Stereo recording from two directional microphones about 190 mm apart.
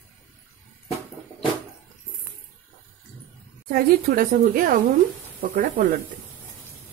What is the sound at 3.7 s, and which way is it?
Speech, 50° right (ahead or behind).